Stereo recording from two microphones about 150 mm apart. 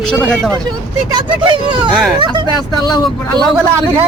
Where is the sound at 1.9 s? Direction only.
5° right (ahead or behind).